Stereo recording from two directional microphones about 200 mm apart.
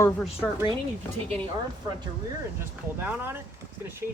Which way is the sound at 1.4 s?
20° right (ahead or behind).